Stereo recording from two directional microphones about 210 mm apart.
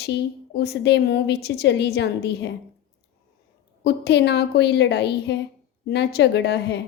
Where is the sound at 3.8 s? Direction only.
55° left (ahead or behind).